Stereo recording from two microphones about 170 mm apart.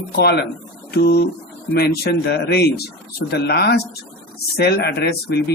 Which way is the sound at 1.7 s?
70° left (ahead or behind).